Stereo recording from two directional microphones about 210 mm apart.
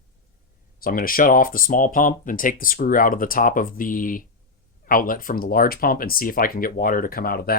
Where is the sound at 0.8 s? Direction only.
45° left (ahead or behind).